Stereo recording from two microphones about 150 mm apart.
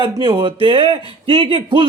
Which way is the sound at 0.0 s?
30° right (ahead or behind).